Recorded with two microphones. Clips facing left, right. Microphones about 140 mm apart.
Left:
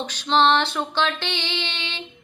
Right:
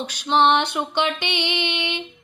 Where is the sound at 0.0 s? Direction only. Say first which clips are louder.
Right 1 dB; 10° right (ahead or behind).